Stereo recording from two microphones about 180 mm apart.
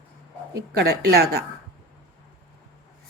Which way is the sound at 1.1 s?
60° right (ahead or behind).